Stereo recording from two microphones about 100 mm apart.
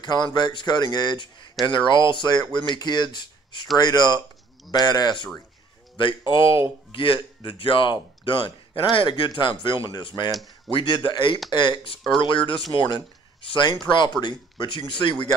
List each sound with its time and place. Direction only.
0.0 s speech: 45° left (ahead or behind)